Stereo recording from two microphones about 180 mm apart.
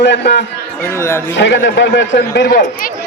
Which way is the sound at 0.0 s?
70° left (ahead or behind).